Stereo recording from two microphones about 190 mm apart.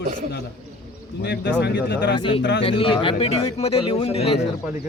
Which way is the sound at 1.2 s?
60° left (ahead or behind).